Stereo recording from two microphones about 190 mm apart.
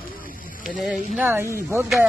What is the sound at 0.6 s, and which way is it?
Speech, centre (ahead or behind).